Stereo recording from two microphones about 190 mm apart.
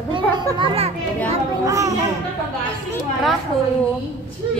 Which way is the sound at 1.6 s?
15° right (ahead or behind).